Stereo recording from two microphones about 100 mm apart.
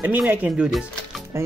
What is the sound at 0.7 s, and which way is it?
Speech, centre (ahead or behind).